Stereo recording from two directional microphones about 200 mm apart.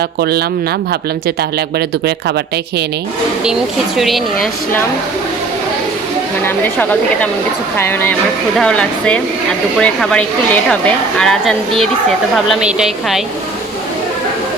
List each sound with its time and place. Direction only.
0.2 s speech: 50° right (ahead or behind)
3.4 s a woman's voice: centre (ahead or behind)
6.4 s a woman's voice: 5° left (ahead or behind)